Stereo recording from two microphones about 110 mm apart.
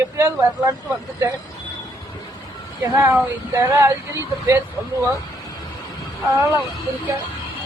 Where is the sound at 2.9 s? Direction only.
25° right (ahead or behind).